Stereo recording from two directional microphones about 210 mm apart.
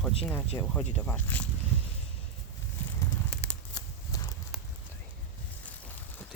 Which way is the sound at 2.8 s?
10° left (ahead or behind).